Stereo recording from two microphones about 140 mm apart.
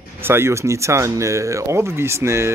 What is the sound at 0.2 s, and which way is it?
Speech, 15° right (ahead or behind).